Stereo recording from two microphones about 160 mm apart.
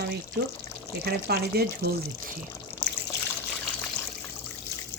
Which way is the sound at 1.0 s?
80° right.